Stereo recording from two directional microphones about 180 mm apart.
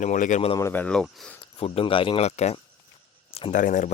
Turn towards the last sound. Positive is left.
turn(degrees=45)  # may be behind; listen again after turning